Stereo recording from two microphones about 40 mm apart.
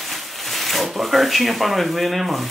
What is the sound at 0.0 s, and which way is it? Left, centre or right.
Speech, centre.